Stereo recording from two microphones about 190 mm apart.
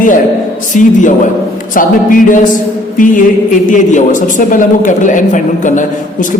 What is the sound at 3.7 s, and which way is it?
A woman's voice, 40° left (ahead or behind).